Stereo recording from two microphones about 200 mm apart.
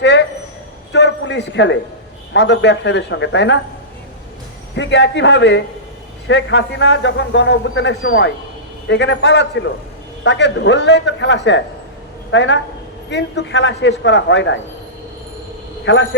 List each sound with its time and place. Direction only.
0.0 s a man's voice: 65° left (ahead or behind)
4.7 s a man's voice: 65° left (ahead or behind)
15.8 s a man's voice: 65° left (ahead or behind)